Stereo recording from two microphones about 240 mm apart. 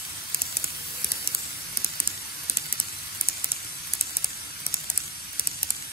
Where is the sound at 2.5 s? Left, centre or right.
Left.